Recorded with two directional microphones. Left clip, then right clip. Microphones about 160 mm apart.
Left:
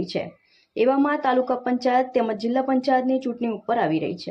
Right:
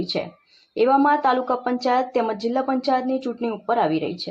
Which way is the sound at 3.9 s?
15° right (ahead or behind).